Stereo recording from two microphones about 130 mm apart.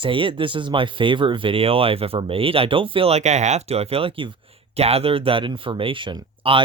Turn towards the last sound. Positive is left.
turn(degrees=-40)  # may be behind; listen again after turning